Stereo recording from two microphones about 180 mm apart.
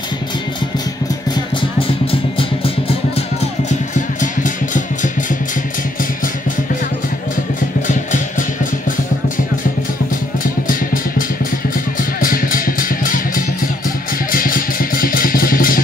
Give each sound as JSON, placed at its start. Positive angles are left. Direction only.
{"t": 1.8, "sound": "music", "side_deg": 30}
{"t": 3.9, "sound": "music", "side_deg": 45}
{"t": 7.8, "sound": "music", "side_deg": 45}
{"t": 10.4, "sound": "music", "side_deg": 50}